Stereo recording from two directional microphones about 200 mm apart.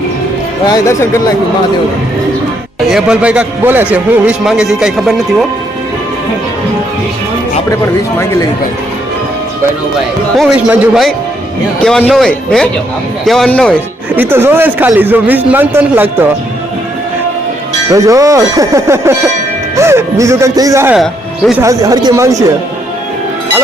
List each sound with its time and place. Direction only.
2.9 s a man's voice: 5° right (ahead or behind)
10.3 s speech: centre (ahead or behind)
14.2 s a man's voice: 10° right (ahead or behind)
17.9 s a man's voice: 15° right (ahead or behind)